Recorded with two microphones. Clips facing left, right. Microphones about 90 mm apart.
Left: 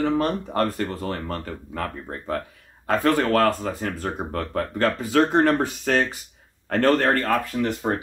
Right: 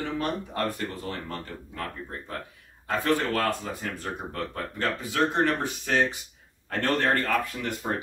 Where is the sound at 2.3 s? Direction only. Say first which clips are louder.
Left 9 dB; 60° left (ahead or behind).